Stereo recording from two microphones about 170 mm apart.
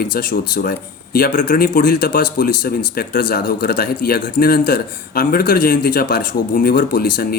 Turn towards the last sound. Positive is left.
turn(degrees=60)  # may be behind; listen again after turning